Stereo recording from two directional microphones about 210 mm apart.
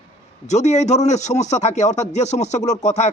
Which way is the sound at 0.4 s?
30° left (ahead or behind).